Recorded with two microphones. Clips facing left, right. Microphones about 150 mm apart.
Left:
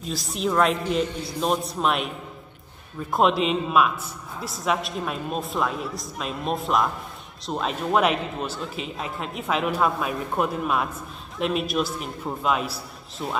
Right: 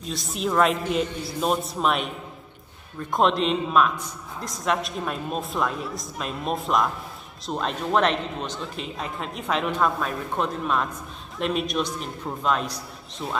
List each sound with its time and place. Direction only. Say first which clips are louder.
0.0 s a man's voice: left 1 dB; centre (ahead or behind)